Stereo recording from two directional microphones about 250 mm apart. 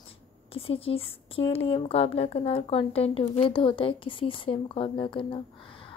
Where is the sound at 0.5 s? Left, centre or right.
Left.